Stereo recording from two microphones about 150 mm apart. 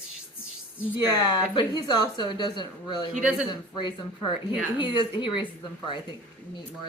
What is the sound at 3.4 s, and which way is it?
A woman's voice, 30° left (ahead or behind).